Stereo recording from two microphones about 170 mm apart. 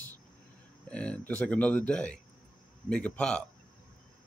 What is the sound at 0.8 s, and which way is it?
Speech, 5° left (ahead or behind).